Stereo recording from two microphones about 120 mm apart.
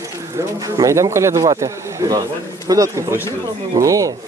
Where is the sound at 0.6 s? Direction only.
25° right (ahead or behind).